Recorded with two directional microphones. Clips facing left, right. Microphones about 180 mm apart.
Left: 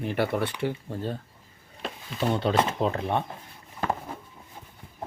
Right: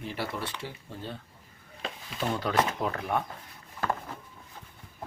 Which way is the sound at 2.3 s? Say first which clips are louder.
Left 3 dB; 25° left (ahead or behind).